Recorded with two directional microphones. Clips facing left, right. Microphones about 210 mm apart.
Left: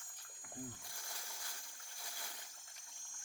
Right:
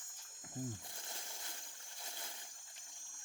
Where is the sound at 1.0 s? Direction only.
25° right (ahead or behind).